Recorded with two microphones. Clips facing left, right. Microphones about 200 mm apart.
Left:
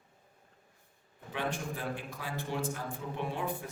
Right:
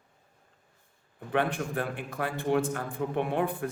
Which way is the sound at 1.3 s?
60° right (ahead or behind).